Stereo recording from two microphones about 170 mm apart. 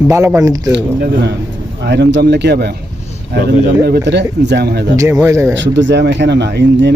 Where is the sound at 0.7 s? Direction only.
85° right.